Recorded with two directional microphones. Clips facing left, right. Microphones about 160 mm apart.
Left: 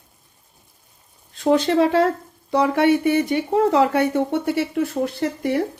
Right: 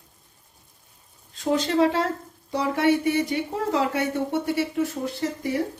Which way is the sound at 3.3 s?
65° left (ahead or behind).